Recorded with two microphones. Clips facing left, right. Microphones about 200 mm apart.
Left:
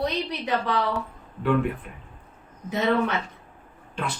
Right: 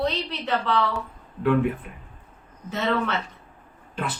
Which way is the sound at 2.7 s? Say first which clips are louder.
Left 2 dB; 15° left (ahead or behind).